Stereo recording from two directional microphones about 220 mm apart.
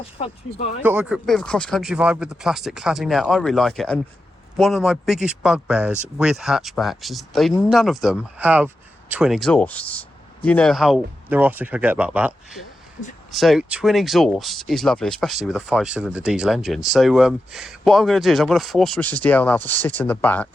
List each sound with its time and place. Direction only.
0.0 s speech: 25° left (ahead or behind)
0.9 s speech: 5° right (ahead or behind)